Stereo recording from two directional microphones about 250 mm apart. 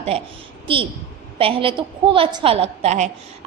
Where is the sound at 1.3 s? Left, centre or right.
Right.